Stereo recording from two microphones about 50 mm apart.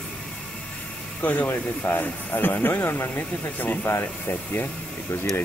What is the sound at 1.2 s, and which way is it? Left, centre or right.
Speech, left.